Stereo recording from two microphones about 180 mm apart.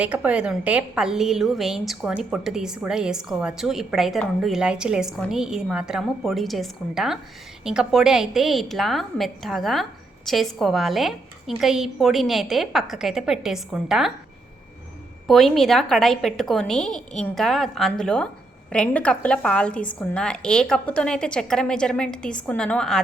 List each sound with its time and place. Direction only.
0.0 s a woman's voice: 5° right (ahead or behind)
15.3 s a woman's voice: centre (ahead or behind)